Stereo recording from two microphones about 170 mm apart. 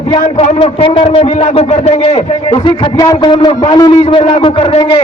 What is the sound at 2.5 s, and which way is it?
A man's voice, 25° left (ahead or behind).